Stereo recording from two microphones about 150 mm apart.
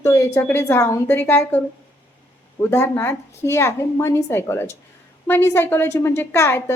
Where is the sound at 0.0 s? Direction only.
20° left (ahead or behind).